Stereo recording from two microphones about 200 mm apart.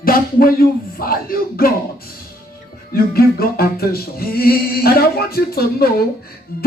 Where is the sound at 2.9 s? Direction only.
50° left (ahead or behind).